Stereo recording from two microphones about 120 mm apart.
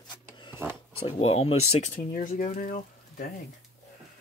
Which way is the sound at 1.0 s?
55° left (ahead or behind).